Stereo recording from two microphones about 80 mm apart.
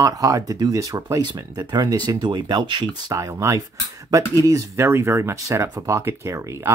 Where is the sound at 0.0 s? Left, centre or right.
Right.